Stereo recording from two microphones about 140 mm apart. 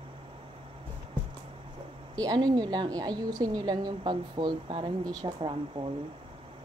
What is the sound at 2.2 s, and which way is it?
A woman's voice, 25° right (ahead or behind).